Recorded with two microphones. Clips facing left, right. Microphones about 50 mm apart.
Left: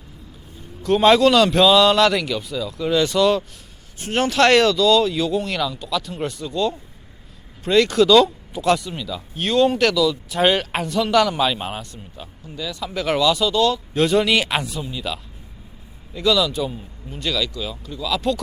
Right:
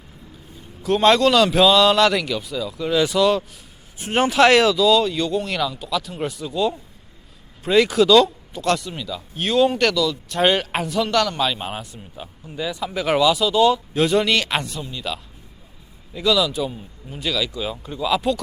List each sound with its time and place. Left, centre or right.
0.8 s speech: centre
3.9 s speech: centre
12.5 s speech: centre
13.9 s speech: centre
17.5 s speech: right